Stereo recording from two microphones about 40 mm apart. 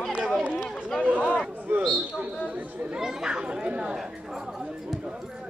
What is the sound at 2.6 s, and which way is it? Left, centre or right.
Chatter, right.